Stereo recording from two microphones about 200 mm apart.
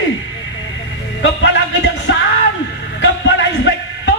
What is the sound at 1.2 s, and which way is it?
Speech, 65° left (ahead or behind).